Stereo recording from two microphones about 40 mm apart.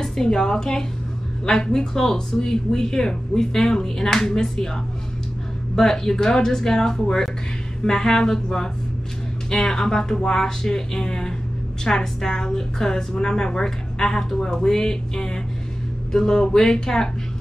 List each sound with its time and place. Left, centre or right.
0.0 s a woman's voice: centre
5.8 s a woman's voice: centre